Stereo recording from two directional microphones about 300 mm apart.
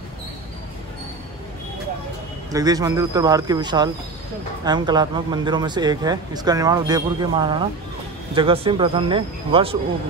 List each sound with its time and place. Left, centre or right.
2.5 s speech: centre